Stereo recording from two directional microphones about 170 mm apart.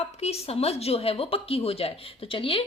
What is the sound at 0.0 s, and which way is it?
Speech, 35° left (ahead or behind).